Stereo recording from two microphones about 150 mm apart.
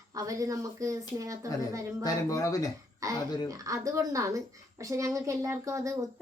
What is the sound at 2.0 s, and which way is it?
Speech, 25° left (ahead or behind).